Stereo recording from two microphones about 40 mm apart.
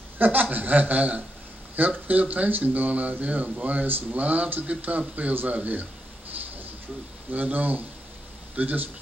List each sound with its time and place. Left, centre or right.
0.2 s chuckle: right
1.8 s speech: right
7.2 s chuckle: right